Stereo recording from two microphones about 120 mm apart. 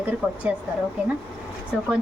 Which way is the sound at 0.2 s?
15° right (ahead or behind).